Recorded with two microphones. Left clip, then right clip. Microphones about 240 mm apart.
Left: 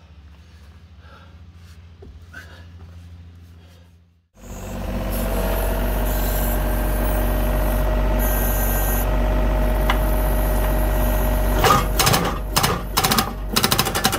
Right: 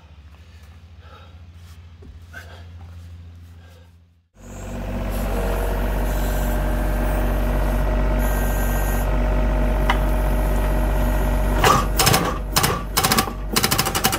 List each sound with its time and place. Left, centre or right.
4.4 s vehicle: left
12.5 s typewriter: centre